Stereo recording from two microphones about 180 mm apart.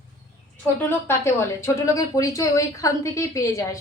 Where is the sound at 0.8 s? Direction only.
15° left (ahead or behind).